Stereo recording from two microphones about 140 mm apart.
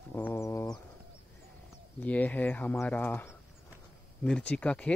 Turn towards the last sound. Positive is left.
turn(degrees=10)  # may be behind; listen again after turning